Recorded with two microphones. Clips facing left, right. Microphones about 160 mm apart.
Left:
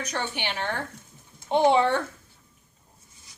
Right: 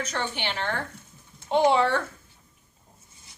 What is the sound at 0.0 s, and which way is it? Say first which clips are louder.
A woman's voice: right 1 dB; 15° left (ahead or behind).